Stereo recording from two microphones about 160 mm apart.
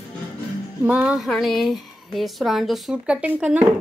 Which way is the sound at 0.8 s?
5° right (ahead or behind).